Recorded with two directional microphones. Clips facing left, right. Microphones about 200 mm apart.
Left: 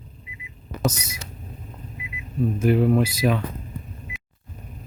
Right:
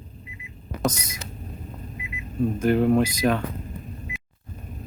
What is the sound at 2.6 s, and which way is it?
Speech, 5° left (ahead or behind).